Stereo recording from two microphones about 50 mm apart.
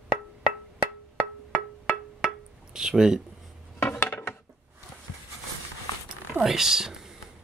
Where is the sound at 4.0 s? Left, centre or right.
Left.